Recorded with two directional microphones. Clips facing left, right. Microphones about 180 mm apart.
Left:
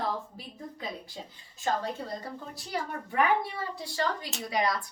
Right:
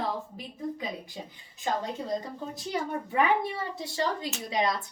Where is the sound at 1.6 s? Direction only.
20° right (ahead or behind).